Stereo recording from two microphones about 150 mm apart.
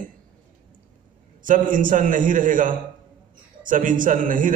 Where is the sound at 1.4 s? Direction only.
65° right (ahead or behind).